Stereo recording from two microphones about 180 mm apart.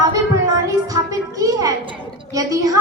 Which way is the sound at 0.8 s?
20° right (ahead or behind).